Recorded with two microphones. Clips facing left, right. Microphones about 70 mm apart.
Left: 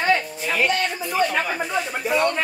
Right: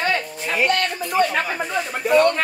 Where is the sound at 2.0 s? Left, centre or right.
Right.